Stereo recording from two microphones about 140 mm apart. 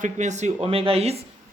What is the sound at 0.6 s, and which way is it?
Speech, 40° right (ahead or behind).